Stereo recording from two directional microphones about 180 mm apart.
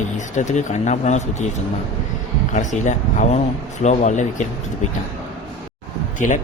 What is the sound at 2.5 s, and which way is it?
A man's voice, 45° left (ahead or behind).